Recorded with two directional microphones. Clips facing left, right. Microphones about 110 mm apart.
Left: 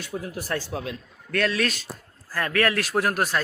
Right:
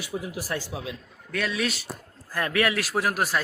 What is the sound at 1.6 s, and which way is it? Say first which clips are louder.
Speech: left 1 dB; 15° right (ahead or behind).